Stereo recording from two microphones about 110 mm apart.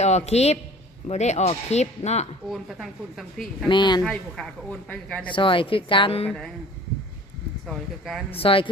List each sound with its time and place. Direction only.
0.0 s a man's voice: 85° left
1.0 s speech: 90° left
2.5 s speech: centre (ahead or behind)
3.7 s speech: 45° left (ahead or behind)
4.0 s speech: 5° left (ahead or behind)
5.3 s speech: 50° left (ahead or behind)
7.7 s speech: centre (ahead or behind)
8.4 s speech: 55° left (ahead or behind)